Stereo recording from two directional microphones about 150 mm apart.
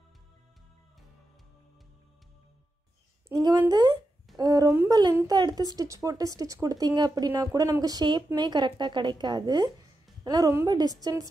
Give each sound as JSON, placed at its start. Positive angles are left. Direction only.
{"t": 3.3, "sound": "speech", "side_deg": -25}
{"t": 4.4, "sound": "a sound", "side_deg": -25}
{"t": 4.8, "sound": "speech", "side_deg": -25}